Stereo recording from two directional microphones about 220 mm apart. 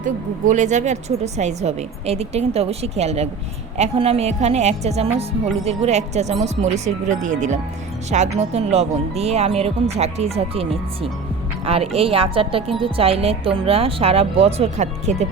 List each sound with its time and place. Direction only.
0.0 s a woman's voice: 35° right (ahead or behind)